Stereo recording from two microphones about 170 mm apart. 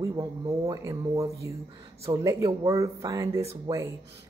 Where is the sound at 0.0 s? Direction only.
20° right (ahead or behind).